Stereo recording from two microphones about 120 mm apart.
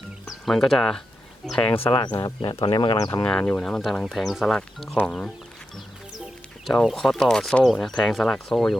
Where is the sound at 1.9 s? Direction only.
35° left (ahead or behind).